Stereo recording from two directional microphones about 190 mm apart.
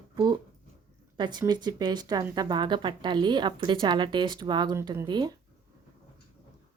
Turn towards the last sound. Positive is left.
turn(degrees=-20)  # may be behind; listen again after turning